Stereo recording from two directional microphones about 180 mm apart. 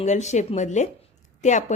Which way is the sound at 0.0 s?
40° left (ahead or behind).